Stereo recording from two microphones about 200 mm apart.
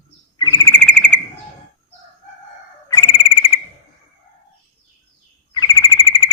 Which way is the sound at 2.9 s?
20° left (ahead or behind).